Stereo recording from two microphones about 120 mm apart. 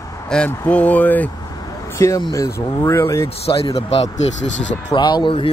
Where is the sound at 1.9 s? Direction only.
25° left (ahead or behind).